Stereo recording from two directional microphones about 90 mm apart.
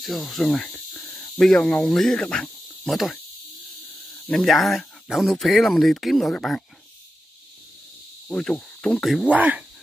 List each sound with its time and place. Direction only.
0.0 s speech: centre (ahead or behind)
1.9 s cricket: 5° left (ahead or behind)
4.5 s speech: centre (ahead or behind)
8.3 s cricket: 10° left (ahead or behind)
9.0 s speech: centre (ahead or behind)
9.3 s speech: 15° right (ahead or behind)